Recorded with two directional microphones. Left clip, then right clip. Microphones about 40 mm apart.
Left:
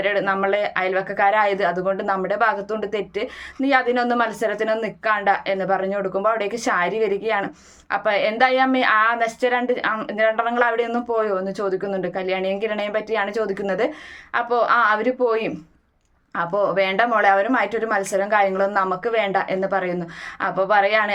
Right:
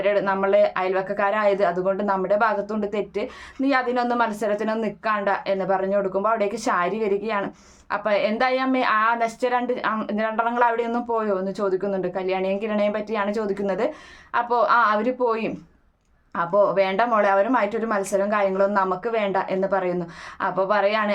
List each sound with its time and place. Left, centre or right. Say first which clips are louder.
0.0 s a woman's voice: left 1 dB; right